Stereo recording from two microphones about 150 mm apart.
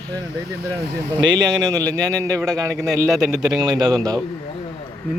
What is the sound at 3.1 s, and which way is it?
Speech, centre (ahead or behind).